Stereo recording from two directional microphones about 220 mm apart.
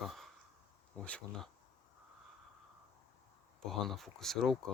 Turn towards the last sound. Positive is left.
turn(degrees=0)  # may be behind; listen again after turning